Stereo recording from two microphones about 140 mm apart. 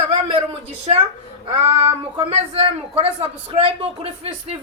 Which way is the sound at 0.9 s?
45° right (ahead or behind).